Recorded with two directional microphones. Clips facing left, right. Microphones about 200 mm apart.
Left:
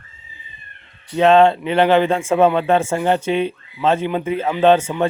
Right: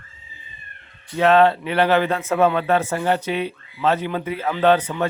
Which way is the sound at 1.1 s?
25° left (ahead or behind).